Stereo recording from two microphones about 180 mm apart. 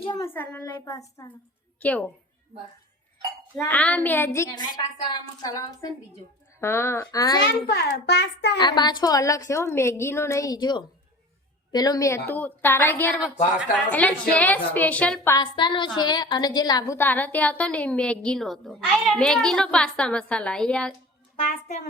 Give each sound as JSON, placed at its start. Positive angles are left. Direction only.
{"t": 0.0, "sound": "a child's voice", "side_deg": 25}
{"t": 0.3, "sound": "a woman's voice", "side_deg": 10}
{"t": 3.7, "sound": "a woman's voice", "side_deg": 10}
{"t": 7.7, "sound": "a child's voice", "side_deg": 65}
{"t": 8.5, "sound": "a woman's voice", "side_deg": 25}
{"t": 15.4, "sound": "a woman's voice", "side_deg": 25}
{"t": 21.3, "sound": "a child's voice", "side_deg": 35}